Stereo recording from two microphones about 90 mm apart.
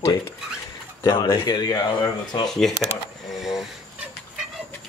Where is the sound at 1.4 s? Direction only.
45° left (ahead or behind).